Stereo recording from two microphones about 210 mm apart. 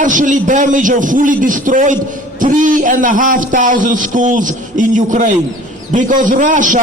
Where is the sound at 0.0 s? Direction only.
40° right (ahead or behind).